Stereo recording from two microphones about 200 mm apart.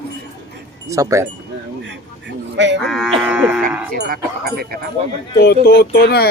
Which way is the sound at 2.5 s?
65° right (ahead or behind).